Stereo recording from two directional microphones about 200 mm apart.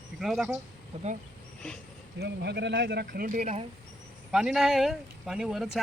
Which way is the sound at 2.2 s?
55° right (ahead or behind).